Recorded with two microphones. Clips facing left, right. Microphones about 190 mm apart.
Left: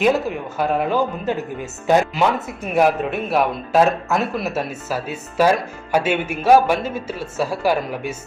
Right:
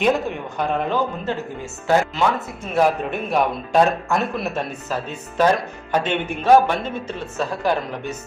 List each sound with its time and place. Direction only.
0.0 s a man's voice: 5° left (ahead or behind)
2.7 s a man's voice: 5° left (ahead or behind)